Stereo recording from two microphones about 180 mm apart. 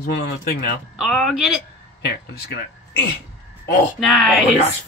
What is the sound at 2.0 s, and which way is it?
Speech, 65° left (ahead or behind).